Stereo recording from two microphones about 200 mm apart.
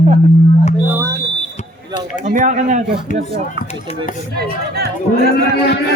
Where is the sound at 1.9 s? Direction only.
35° right (ahead or behind).